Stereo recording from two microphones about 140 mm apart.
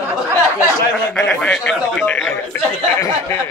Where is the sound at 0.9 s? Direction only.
5° left (ahead or behind).